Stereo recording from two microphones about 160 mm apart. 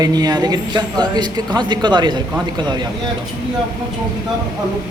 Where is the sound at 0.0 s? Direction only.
25° right (ahead or behind).